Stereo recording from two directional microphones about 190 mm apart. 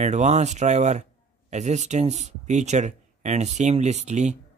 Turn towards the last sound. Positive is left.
turn(degrees=-35)  # may be behind; listen again after turning